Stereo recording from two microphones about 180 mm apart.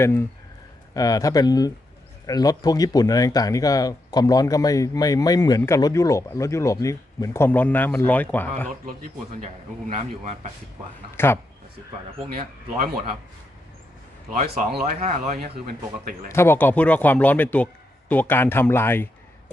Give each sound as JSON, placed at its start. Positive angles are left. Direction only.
{"t": 0.0, "sound": "speech", "side_deg": 15}
{"t": 9.4, "sound": "a man's voice", "side_deg": -40}
{"t": 11.1, "sound": "speech", "side_deg": 15}
{"t": 14.4, "sound": "speech", "side_deg": -60}
{"t": 16.3, "sound": "speech", "side_deg": 15}